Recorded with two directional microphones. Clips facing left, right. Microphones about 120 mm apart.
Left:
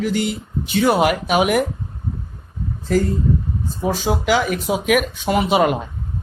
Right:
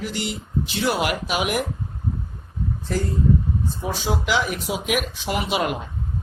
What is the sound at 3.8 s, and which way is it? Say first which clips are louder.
Speech: left 7 dB; 45° left (ahead or behind).